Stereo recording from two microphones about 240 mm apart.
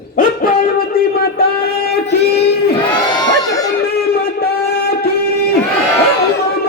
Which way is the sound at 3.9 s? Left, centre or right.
Left.